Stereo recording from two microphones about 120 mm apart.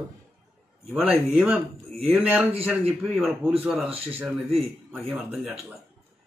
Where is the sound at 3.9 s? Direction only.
55° right (ahead or behind).